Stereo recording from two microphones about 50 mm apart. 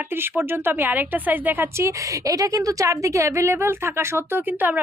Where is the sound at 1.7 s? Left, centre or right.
Right.